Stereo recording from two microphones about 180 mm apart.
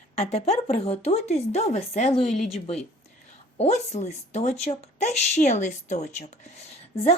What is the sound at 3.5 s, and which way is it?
A woman's voice, 35° left (ahead or behind).